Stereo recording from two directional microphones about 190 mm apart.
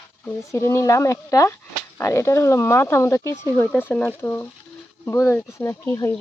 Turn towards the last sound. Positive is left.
turn(degrees=15)  # may be behind; listen again after turning